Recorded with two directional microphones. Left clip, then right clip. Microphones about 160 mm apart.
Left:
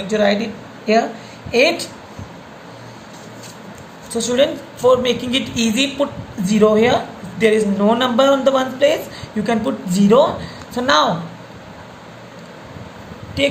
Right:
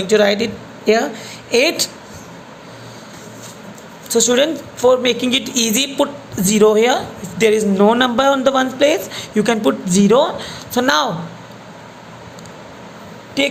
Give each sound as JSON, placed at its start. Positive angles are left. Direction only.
{"t": 0.1, "sound": "speech", "side_deg": -70}
{"t": 4.1, "sound": "a man's voice", "side_deg": -65}